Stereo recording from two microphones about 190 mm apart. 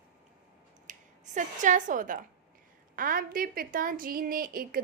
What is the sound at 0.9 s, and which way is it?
A woman's voice, 40° right (ahead or behind).